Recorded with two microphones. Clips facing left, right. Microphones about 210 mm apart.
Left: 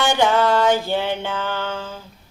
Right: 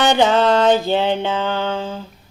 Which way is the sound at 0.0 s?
20° right (ahead or behind).